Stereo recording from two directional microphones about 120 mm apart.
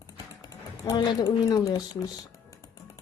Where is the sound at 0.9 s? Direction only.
30° left (ahead or behind).